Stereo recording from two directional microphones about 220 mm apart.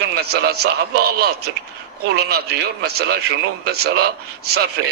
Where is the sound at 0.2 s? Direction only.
45° right (ahead or behind).